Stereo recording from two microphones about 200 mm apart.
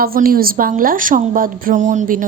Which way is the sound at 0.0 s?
45° right (ahead or behind).